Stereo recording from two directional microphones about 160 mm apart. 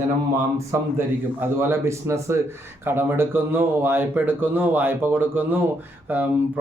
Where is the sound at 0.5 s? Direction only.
15° right (ahead or behind).